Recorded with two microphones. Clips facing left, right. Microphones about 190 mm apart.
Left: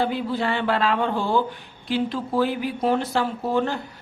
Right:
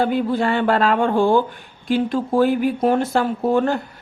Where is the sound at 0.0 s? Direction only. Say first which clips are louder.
Right 5 dB; 50° right (ahead or behind).